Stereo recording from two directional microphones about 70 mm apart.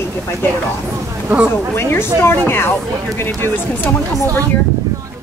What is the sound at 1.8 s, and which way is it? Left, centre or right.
Speech, left.